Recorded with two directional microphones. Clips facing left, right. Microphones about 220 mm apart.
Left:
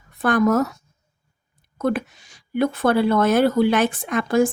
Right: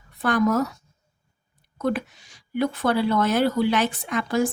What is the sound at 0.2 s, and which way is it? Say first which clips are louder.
Speech: left 3 dB; 50° left (ahead or behind).